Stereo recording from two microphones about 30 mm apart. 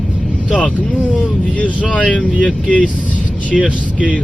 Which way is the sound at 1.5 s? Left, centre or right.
Left.